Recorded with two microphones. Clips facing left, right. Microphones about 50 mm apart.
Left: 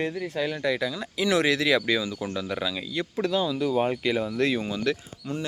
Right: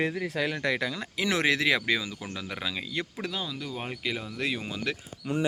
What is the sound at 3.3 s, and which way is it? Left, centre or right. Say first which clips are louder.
Speech: left 11 dB; centre.